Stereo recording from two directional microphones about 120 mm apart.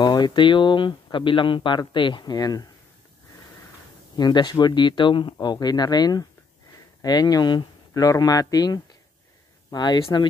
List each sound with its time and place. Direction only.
0.0 s speech: 35° left (ahead or behind)
4.2 s speech: 35° left (ahead or behind)